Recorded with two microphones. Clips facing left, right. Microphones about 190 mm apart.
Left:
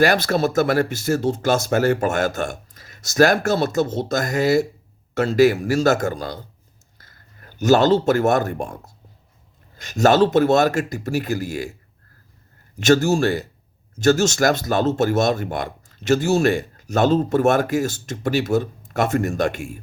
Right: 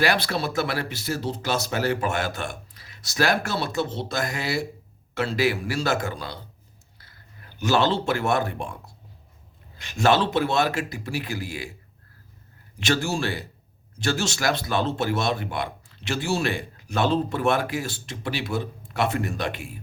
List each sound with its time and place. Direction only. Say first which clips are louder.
0.0 s speech: left 6 dB; 45° left (ahead or behind)
12.7 s speech: left 9 dB; 45° left (ahead or behind)